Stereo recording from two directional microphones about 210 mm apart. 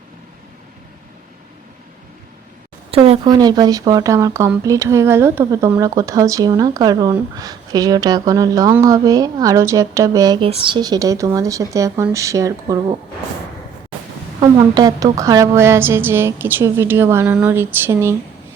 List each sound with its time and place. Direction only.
2.9 s speech: 30° right (ahead or behind)
14.4 s speech: 20° right (ahead or behind)